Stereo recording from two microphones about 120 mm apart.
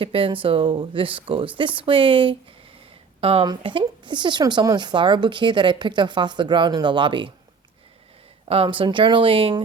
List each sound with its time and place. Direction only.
0.0 s speech: 50° right (ahead or behind)
3.4 s speech: 40° right (ahead or behind)
8.4 s speech: 50° right (ahead or behind)